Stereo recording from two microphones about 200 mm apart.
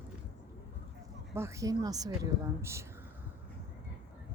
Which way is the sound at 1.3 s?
15° right (ahead or behind).